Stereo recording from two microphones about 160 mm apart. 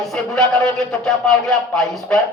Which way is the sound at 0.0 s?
Centre (ahead or behind).